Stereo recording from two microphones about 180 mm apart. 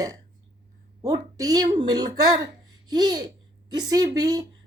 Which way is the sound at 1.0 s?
20° right (ahead or behind).